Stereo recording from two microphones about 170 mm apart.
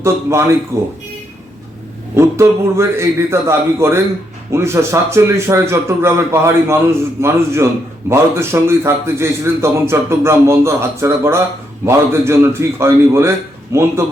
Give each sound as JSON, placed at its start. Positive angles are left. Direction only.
{"t": 0.0, "sound": "a man's voice", "side_deg": -15}
{"t": 2.1, "sound": "a man's voice", "side_deg": -15}